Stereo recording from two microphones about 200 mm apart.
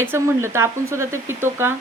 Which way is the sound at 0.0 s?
10° right (ahead or behind).